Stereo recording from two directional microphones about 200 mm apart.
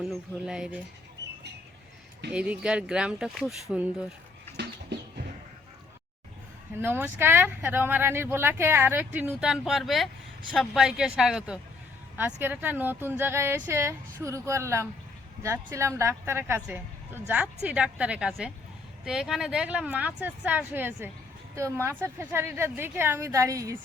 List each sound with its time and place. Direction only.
0.0 s speech: 5° right (ahead or behind)
2.3 s speech: 5° right (ahead or behind)
4.5 s bird: 55° right (ahead or behind)
6.7 s speech: 10° right (ahead or behind)